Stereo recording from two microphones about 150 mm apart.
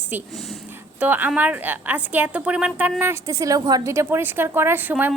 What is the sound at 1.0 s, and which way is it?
A woman's voice, 10° right (ahead or behind).